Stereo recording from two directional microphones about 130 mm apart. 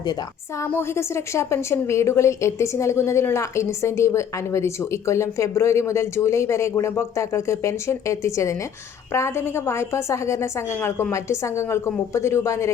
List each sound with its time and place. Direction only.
0.6 s a woman's voice: 20° left (ahead or behind)